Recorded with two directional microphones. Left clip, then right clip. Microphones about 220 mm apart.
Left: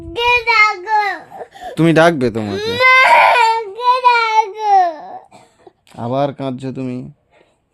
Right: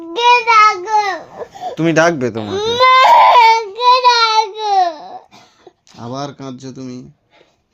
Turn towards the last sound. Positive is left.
turn(degrees=45)  # may be behind; listen again after turning